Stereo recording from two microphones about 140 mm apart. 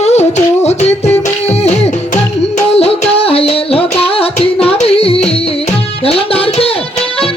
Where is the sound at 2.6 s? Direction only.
45° left (ahead or behind).